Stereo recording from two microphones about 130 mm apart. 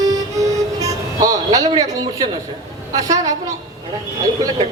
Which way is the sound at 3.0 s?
25° right (ahead or behind).